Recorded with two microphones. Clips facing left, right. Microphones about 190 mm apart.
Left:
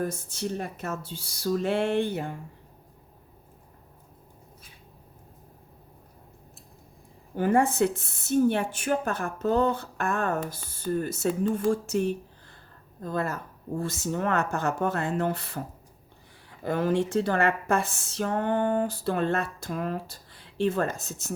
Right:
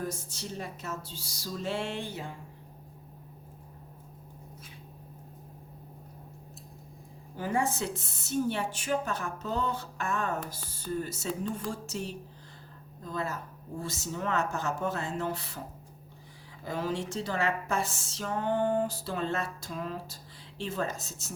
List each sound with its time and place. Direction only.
0.0 s speech: 55° left (ahead or behind)
7.3 s speech: 60° left (ahead or behind)
16.6 s speech: 60° left (ahead or behind)